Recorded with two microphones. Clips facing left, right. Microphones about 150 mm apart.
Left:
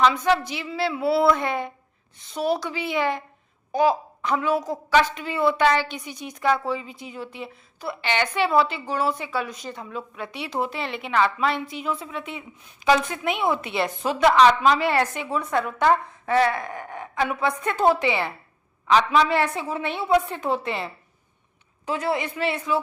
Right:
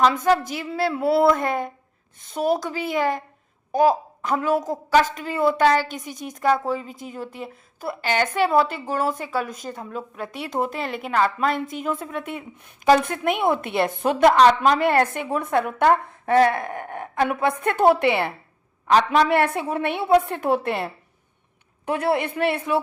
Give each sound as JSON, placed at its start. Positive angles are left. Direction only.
{"t": 0.0, "sound": "a woman's voice", "side_deg": -45}